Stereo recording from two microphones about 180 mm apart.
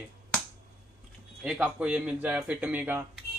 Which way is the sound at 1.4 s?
5° right (ahead or behind).